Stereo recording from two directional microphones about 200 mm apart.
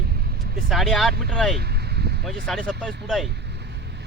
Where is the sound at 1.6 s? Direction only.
55° right (ahead or behind).